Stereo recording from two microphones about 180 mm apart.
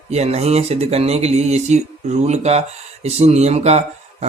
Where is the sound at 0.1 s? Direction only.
35° right (ahead or behind).